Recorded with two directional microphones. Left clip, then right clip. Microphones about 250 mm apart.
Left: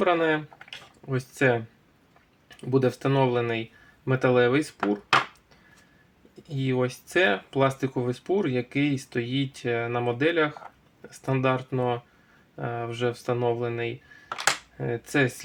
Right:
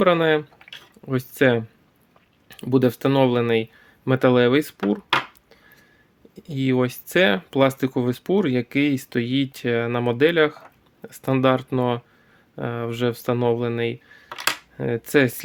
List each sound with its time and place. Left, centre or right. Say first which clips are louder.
0.0 s speech: right 5 dB; right
6.5 s speech: right 5 dB; right